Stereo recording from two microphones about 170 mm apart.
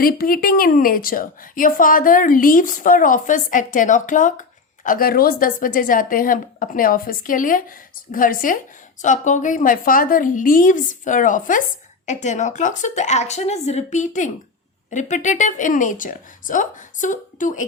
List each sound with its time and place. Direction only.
0.0 s a woman's voice: 60° left (ahead or behind)